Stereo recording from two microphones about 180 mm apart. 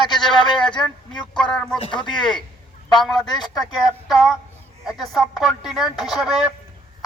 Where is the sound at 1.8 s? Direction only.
25° left (ahead or behind).